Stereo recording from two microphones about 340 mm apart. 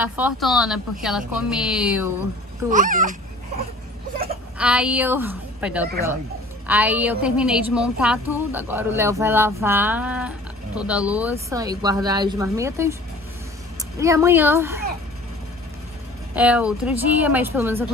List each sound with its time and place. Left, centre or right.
0.0 s speech: centre
2.7 s speech: right
4.6 s a woman's voice: centre
13.9 s a woman's voice: centre
16.3 s speech: centre